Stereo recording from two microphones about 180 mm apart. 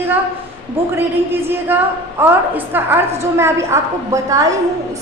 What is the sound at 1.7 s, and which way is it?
Speech, 10° right (ahead or behind).